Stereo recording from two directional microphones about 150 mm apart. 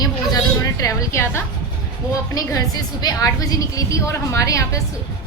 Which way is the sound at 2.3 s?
25° left (ahead or behind).